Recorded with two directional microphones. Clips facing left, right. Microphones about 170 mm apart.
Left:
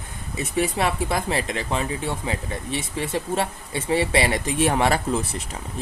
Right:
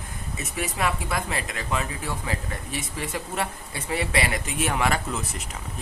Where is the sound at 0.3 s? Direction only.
30° left (ahead or behind).